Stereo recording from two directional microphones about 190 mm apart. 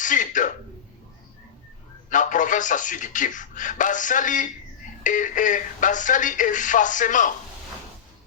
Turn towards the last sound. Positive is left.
turn(degrees=40)  # may be behind; listen again after turning